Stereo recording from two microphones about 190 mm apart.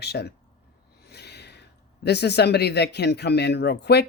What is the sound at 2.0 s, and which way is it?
Speech, 60° left (ahead or behind).